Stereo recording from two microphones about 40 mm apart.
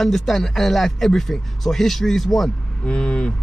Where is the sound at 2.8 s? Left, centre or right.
Left.